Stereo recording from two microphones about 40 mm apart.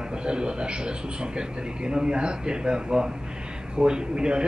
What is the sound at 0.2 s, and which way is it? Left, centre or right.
A man's voice, right.